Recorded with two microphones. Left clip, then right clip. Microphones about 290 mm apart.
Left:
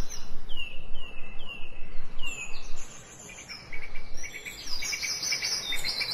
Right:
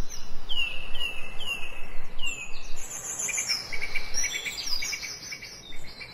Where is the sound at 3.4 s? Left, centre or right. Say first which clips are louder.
Right 10 dB; right.